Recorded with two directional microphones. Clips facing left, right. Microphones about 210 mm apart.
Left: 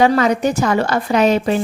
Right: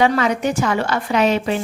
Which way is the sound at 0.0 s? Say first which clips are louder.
Left 3 dB; 40° left (ahead or behind).